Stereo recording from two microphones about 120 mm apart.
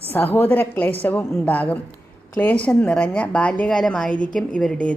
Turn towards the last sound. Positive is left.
turn(degrees=10)  # may be behind; listen again after turning